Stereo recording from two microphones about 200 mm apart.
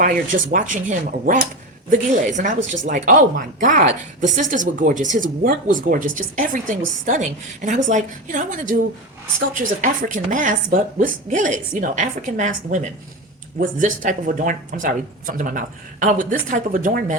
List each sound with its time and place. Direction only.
0.0 s speech: 40° right (ahead or behind)